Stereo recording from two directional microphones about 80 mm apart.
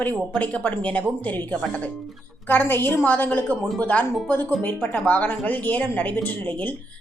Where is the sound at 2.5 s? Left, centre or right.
Left.